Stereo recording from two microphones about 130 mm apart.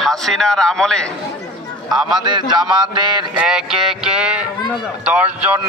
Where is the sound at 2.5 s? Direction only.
35° right (ahead or behind).